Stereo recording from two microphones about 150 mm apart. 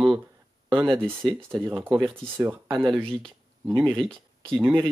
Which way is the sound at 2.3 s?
15° right (ahead or behind).